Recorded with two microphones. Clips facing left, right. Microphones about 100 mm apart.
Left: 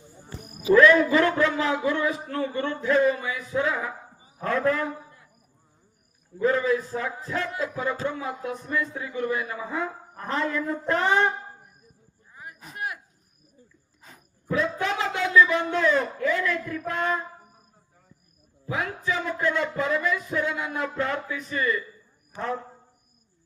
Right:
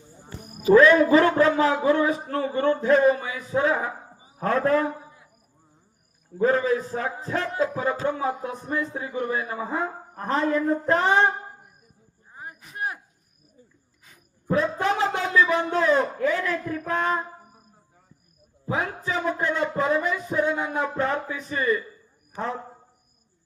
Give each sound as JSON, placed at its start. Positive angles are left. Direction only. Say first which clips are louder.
{"t": 0.7, "sound": "a man's voice", "louder": "right 2 dB", "side_deg": -30}
{"t": 6.4, "sound": "a man's voice", "louder": "right 1 dB", "side_deg": -35}
{"t": 12.3, "sound": "a sound", "louder": "right 3 dB", "side_deg": -30}
{"t": 14.4, "sound": "a sound", "louder": "right 3 dB", "side_deg": -40}
{"t": 15.7, "sound": "a man's voice", "louder": "right 2 dB", "side_deg": -35}
{"t": 18.6, "sound": "a man's voice", "louder": "right 2 dB", "side_deg": -30}